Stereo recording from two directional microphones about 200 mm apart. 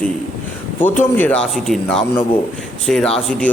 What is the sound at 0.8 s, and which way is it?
A man's voice, 10° left (ahead or behind).